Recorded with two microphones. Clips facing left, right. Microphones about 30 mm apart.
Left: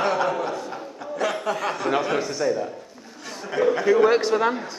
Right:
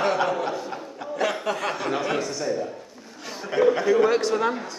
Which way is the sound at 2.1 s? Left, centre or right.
Centre.